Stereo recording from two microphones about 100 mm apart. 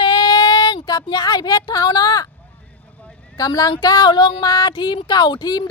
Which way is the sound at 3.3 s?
40° left (ahead or behind).